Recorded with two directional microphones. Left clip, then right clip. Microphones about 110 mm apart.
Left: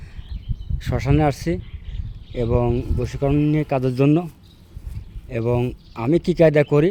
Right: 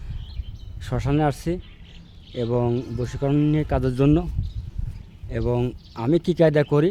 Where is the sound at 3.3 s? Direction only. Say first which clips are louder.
Left 1 dB; centre (ahead or behind).